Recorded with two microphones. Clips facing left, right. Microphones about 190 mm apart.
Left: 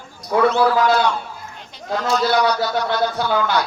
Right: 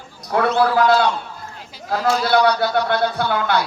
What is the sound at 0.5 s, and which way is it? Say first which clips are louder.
Speech: right 1 dB; 60° right (ahead or behind).